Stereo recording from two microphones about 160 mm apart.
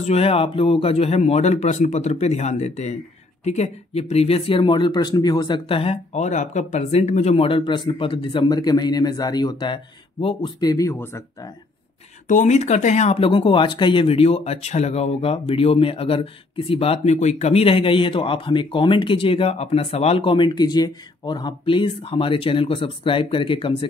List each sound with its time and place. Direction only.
0.0 s speech: 40° left (ahead or behind); by 11.5 s 15° left (ahead or behind)
12.3 s speech: 50° left (ahead or behind); by 23.9 s 30° left (ahead or behind)